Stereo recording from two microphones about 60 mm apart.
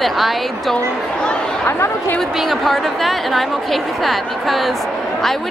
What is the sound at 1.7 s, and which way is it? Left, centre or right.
Speech, left.